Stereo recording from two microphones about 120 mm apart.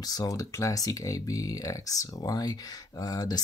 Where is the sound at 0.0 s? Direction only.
30° left (ahead or behind).